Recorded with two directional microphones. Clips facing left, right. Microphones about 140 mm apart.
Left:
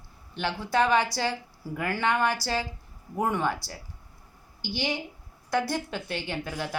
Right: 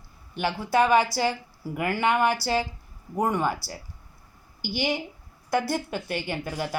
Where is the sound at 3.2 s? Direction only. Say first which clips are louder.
Right 2 dB; centre (ahead or behind).